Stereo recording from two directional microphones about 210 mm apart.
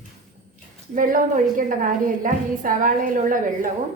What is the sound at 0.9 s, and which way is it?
A woman's voice, 40° right (ahead or behind).